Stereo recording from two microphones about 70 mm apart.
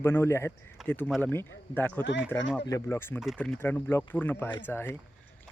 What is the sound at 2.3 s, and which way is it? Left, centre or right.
Speech, centre.